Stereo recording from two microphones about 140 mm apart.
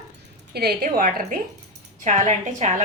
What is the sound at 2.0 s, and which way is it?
Speech, 55° right (ahead or behind).